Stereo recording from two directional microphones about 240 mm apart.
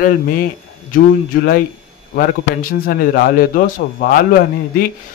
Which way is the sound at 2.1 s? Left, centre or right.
Left.